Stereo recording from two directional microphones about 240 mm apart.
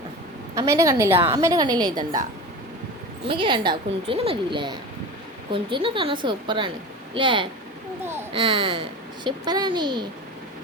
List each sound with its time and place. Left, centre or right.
0.5 s a woman's voice: centre
3.2 s a woman's voice: right